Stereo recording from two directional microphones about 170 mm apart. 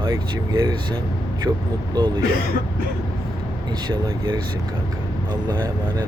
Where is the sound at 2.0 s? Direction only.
25° right (ahead or behind).